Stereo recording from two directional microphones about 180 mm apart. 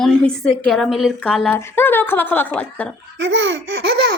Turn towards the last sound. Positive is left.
turn(degrees=-75)  # may be behind; listen again after turning